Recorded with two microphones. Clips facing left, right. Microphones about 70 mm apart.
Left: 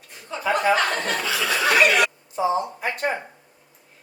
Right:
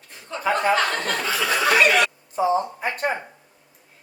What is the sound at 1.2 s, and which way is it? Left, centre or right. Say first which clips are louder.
Speech: right 1 dB; right.